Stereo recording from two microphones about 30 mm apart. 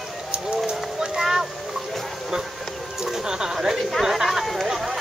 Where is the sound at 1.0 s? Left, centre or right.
Centre.